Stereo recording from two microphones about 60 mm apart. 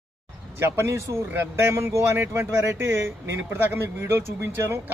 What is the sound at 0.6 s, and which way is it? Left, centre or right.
Speech, right.